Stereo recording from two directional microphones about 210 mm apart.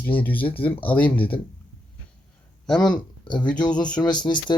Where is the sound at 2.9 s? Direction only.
20° left (ahead or behind).